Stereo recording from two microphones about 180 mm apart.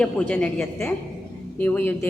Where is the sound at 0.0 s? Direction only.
5° left (ahead or behind).